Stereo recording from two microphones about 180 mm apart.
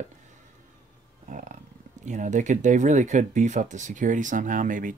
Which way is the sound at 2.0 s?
45° right (ahead or behind).